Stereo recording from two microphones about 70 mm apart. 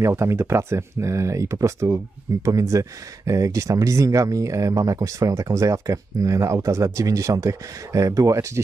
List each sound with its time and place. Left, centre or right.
0.0 s speech: right